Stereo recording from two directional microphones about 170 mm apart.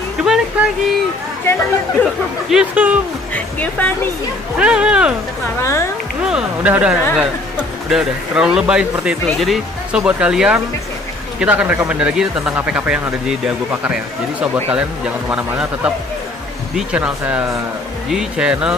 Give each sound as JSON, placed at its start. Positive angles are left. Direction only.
{"t": 0.2, "sound": "music", "side_deg": -5}
{"t": 1.4, "sound": "speech", "side_deg": 15}
{"t": 2.5, "sound": "speech", "side_deg": -10}
{"t": 3.3, "sound": "speech", "side_deg": 10}
{"t": 4.6, "sound": "speech", "side_deg": -5}
{"t": 5.6, "sound": "speech", "side_deg": 15}
{"t": 6.2, "sound": "speech", "side_deg": -5}